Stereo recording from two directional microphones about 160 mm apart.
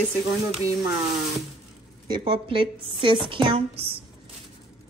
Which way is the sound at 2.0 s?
30° right (ahead or behind).